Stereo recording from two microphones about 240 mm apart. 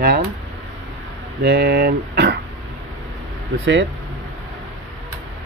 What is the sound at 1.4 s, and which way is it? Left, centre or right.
Speech, right.